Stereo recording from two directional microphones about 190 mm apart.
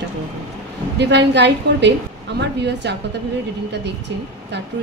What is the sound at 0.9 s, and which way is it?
A woman's voice, 65° right (ahead or behind).